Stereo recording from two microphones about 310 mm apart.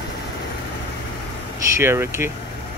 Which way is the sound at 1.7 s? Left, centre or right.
Centre.